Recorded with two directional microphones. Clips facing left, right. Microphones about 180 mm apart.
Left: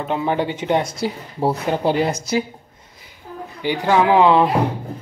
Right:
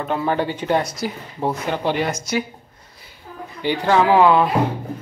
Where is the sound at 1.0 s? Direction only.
35° left (ahead or behind).